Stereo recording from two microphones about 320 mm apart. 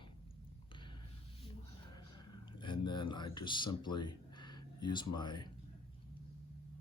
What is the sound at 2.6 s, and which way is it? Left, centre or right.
Speech, centre.